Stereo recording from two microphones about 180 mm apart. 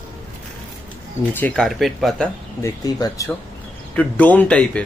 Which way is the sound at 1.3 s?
5° left (ahead or behind).